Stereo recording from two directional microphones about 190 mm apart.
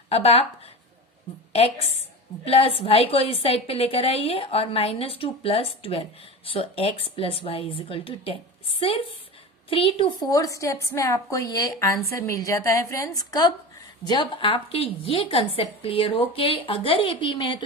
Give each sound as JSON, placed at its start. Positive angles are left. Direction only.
{"t": 0.1, "sound": "a woman's voice", "side_deg": 30}